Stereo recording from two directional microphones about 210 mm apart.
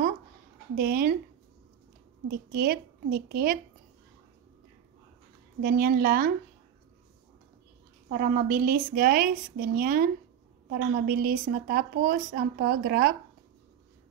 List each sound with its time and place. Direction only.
0.7 s a woman's voice: 45° right (ahead or behind)
2.5 s a woman's voice: 45° right (ahead or behind)
5.6 s a woman's voice: 45° right (ahead or behind)
8.1 s a woman's voice: 40° right (ahead or behind)